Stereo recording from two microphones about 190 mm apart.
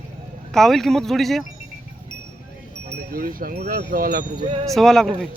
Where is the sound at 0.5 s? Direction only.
Centre (ahead or behind).